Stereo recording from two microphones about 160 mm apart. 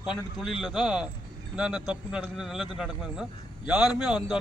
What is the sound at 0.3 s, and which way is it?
A man's voice, centre (ahead or behind).